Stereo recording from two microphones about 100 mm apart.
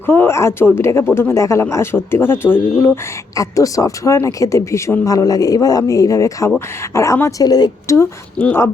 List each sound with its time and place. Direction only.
0.0 s speech: 20° left (ahead or behind)
3.3 s speech: 35° left (ahead or behind)
7.9 s speech: 20° left (ahead or behind)